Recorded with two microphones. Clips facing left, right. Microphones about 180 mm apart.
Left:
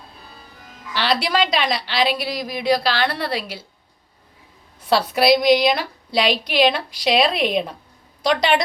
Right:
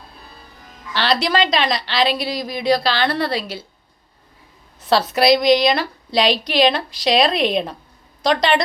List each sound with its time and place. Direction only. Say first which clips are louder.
0.9 s a woman's voice: right 2 dB; 10° left (ahead or behind)
4.9 s a woman's voice: right 1 dB; 10° left (ahead or behind)